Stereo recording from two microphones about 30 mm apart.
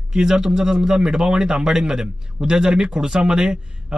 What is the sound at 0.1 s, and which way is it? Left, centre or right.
A man's voice, right.